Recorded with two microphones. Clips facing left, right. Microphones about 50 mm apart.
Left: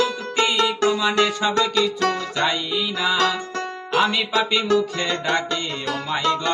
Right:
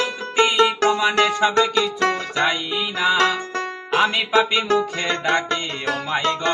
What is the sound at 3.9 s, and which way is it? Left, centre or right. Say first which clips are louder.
Speech: right 1 dB; centre.